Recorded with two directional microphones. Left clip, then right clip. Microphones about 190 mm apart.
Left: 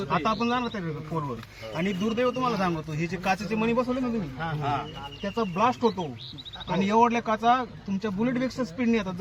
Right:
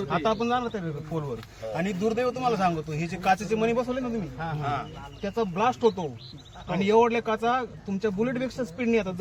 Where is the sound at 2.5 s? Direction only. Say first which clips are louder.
Right 3 dB; 45° right (ahead or behind).